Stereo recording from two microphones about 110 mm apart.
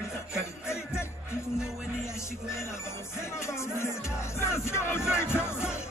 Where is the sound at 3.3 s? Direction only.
25° left (ahead or behind).